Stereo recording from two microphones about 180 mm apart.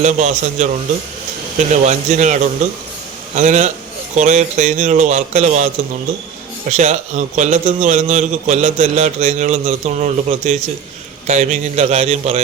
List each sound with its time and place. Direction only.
0.0 s a man's voice: 40° right (ahead or behind)
6.7 s a man's voice: 40° right (ahead or behind)